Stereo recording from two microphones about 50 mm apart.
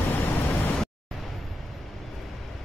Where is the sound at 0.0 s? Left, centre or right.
Left.